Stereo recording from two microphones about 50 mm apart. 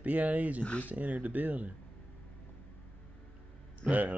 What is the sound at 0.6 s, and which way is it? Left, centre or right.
Speech, left.